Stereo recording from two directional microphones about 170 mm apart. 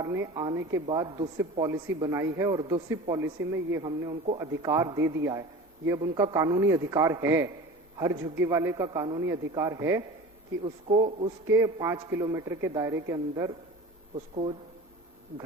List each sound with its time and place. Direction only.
0.0 s a man's voice: 20° right (ahead or behind)
10.6 s speech: 30° right (ahead or behind)
11.4 s a man's voice: 15° right (ahead or behind)